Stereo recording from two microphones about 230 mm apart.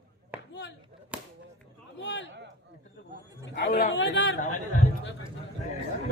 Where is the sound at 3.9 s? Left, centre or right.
Left.